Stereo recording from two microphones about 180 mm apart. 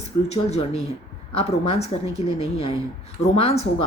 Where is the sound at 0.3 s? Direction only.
35° left (ahead or behind).